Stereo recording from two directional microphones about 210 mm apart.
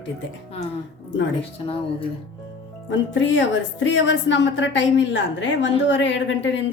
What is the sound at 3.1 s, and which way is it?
A woman's voice, 60° left (ahead or behind).